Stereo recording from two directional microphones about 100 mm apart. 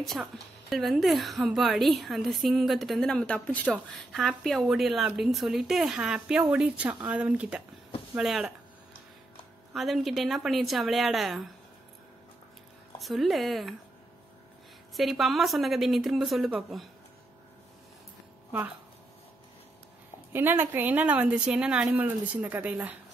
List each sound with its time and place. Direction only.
0.0 s a woman's voice: centre (ahead or behind)
9.8 s a woman's voice: centre (ahead or behind)
13.0 s a woman's voice: centre (ahead or behind)
15.0 s a woman's voice: centre (ahead or behind)
20.3 s speech: 20° right (ahead or behind)